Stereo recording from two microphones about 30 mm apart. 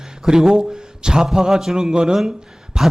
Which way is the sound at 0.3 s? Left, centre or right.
Right.